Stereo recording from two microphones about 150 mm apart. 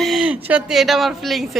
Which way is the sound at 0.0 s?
5° right (ahead or behind).